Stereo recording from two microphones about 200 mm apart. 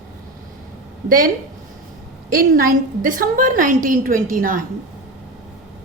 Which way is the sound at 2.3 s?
45° right (ahead or behind).